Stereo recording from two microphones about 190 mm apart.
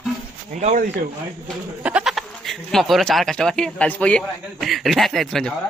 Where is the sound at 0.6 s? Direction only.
40° right (ahead or behind).